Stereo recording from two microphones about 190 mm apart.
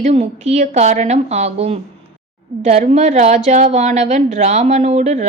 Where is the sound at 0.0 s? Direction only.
35° right (ahead or behind).